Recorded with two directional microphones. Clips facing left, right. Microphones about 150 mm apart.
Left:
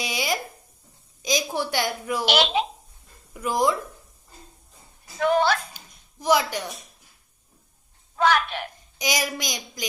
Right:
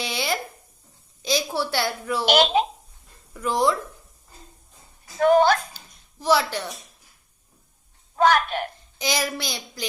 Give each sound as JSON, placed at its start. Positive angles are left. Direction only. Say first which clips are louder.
{"t": 0.0, "sound": "a sound", "louder": "even", "side_deg": 10}
{"t": 1.2, "sound": "a woman's voice", "louder": "right 1 dB", "side_deg": 15}
{"t": 2.2, "sound": "speech", "louder": "right 4 dB", "side_deg": -45}
{"t": 3.3, "sound": "a woman's voice", "louder": "right 1 dB", "side_deg": 10}
{"t": 5.2, "sound": "speech", "louder": "right 4 dB", "side_deg": -45}
{"t": 5.7, "sound": "dog", "louder": "even", "side_deg": 15}
{"t": 8.1, "sound": "speech", "louder": "right 2 dB", "side_deg": -45}
{"t": 9.0, "sound": "a woman's voice", "louder": "right 1 dB", "side_deg": 15}